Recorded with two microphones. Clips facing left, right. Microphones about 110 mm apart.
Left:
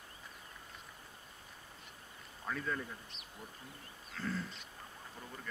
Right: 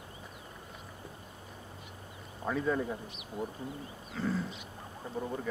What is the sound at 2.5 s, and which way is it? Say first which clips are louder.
Speech: right 8 dB; 15° right (ahead or behind).